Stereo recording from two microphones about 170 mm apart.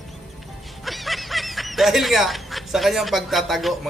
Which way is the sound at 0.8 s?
Centre (ahead or behind).